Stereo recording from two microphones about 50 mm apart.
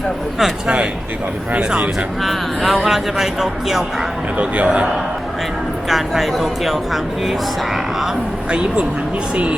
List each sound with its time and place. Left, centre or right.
1.5 s a man's voice: right
2.2 s speech: centre
4.4 s a man's voice: right
5.9 s speech: centre
8.4 s a man's voice: right